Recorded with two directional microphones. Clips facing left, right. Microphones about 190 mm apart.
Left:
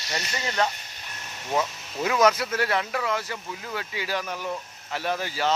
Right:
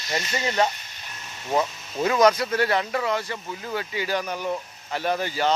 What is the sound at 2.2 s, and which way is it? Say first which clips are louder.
Speech: right 2 dB; 5° left (ahead or behind).